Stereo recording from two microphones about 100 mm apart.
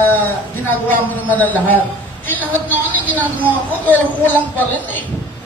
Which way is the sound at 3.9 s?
15° left (ahead or behind).